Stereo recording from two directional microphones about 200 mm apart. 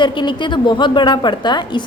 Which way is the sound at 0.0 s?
25° left (ahead or behind).